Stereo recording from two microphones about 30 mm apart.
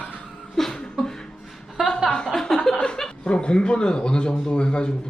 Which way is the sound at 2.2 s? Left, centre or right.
Centre.